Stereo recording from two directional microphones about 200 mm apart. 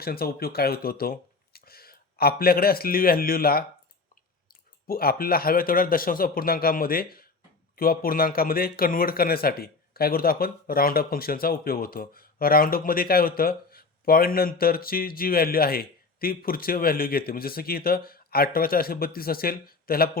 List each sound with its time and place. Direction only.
0.0 s speech: 50° left (ahead or behind)
4.9 s speech: 50° left (ahead or behind)